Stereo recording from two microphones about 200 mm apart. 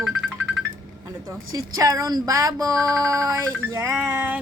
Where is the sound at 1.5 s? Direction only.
15° right (ahead or behind).